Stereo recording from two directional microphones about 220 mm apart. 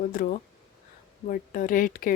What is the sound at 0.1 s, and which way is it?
Speech, 40° left (ahead or behind).